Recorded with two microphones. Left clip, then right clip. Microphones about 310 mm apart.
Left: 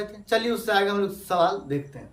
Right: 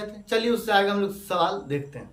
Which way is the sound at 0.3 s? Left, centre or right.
Centre.